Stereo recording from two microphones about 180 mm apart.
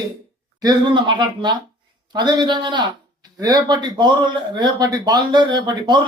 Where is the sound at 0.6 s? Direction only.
25° right (ahead or behind).